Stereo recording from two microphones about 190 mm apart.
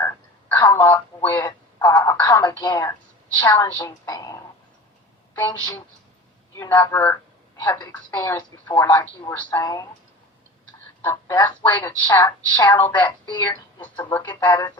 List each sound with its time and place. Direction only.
0.0 s telephone: 15° left (ahead or behind)
3.4 s a woman's voice: 20° left (ahead or behind)
11.0 s a woman's voice: 15° left (ahead or behind)
13.8 s a woman's voice: 10° left (ahead or behind)